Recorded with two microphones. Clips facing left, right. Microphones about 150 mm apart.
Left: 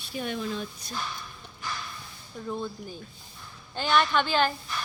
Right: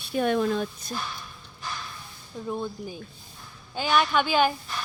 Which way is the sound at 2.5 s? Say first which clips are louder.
Right 2 dB; 15° right (ahead or behind).